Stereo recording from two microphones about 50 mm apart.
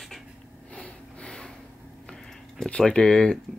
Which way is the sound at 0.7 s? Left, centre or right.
Left.